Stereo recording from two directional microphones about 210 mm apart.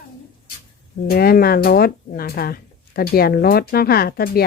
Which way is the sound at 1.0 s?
45° left (ahead or behind).